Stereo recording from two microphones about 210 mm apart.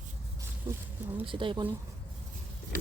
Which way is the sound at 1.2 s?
25° right (ahead or behind).